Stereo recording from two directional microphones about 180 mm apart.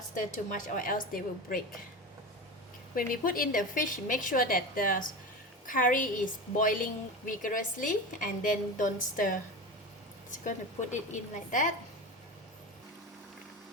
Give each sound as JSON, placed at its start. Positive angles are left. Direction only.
{"t": 0.2, "sound": "a woman's voice", "side_deg": 45}
{"t": 2.9, "sound": "a woman's voice", "side_deg": 50}